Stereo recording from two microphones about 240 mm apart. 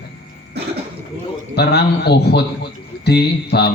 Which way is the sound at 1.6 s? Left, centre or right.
Left.